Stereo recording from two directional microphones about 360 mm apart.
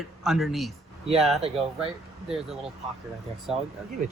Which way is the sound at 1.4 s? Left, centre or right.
Centre.